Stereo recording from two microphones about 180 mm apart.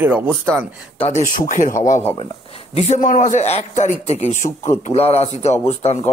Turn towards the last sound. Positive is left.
turn(degrees=35)  # may be behind; listen again after turning